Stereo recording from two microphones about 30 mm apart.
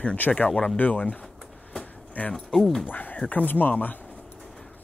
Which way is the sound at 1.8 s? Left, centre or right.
Left.